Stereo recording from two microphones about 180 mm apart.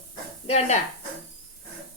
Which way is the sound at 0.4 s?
40° left (ahead or behind).